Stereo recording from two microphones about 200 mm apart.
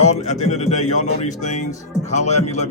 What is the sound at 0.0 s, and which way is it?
Speech, 35° left (ahead or behind).